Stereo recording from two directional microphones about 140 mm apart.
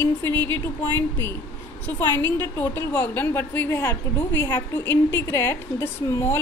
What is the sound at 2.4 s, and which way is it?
A woman's voice, 15° left (ahead or behind).